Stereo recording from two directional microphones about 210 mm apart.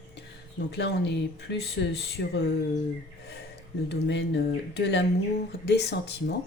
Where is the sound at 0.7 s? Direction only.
55° left (ahead or behind).